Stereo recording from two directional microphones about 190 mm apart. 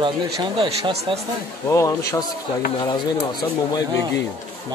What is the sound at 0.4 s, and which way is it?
Speech, 25° right (ahead or behind).